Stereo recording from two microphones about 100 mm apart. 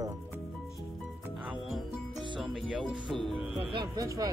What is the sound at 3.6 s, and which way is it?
Music, 60° right (ahead or behind).